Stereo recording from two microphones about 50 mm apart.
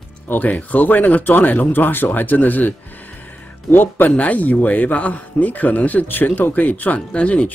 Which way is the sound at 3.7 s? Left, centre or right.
Left.